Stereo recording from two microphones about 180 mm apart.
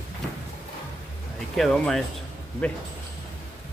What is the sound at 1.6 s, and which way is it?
Speech, centre (ahead or behind).